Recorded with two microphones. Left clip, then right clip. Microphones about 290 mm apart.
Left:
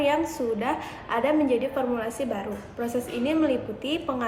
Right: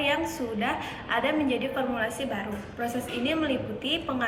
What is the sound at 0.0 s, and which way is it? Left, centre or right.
A woman's voice, centre.